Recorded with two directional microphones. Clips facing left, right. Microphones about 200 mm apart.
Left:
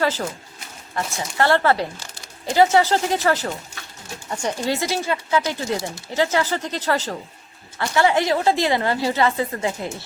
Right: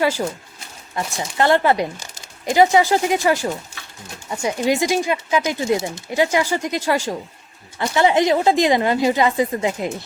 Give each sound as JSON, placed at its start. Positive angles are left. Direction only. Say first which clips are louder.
{"t": 0.0, "sound": "a woman's voice", "louder": "right 3 dB", "side_deg": -15}
{"t": 1.4, "sound": "a woman's voice", "louder": "right 2 dB", "side_deg": -15}